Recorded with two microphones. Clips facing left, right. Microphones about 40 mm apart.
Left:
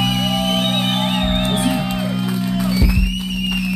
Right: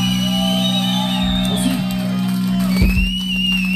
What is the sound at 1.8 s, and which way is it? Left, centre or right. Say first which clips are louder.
Music: even; left.